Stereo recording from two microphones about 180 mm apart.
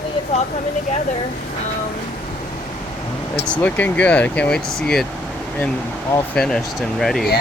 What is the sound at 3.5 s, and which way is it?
Speech, 10° left (ahead or behind).